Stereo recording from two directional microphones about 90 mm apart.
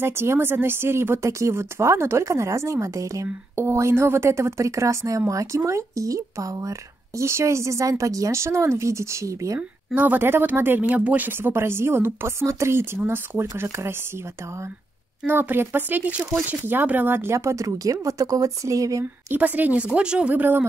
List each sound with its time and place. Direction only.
0.0 s speech: 25° right (ahead or behind)
9.9 s speech: 20° right (ahead or behind)
15.2 s speech: 20° right (ahead or behind); by 19.0 s 40° right (ahead or behind)
19.3 s speech: 20° right (ahead or behind)